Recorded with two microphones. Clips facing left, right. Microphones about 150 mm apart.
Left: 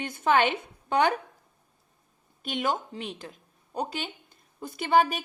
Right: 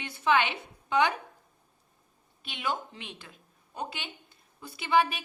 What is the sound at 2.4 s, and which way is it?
A woman's voice, 45° left (ahead or behind).